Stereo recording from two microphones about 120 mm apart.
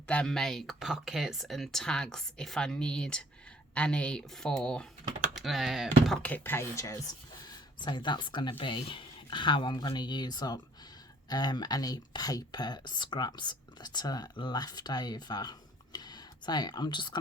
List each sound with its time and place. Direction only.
0.1 s speech: 5° left (ahead or behind)
6.2 s speech: 15° left (ahead or behind)
7.4 s speech: 40° left (ahead or behind)